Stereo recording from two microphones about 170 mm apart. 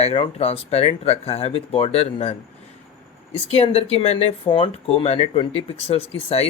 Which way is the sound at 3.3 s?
35° left (ahead or behind).